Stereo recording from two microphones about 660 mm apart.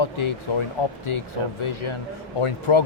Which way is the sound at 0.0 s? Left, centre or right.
Left.